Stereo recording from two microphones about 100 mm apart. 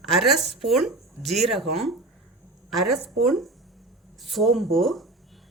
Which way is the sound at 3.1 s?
Centre (ahead or behind).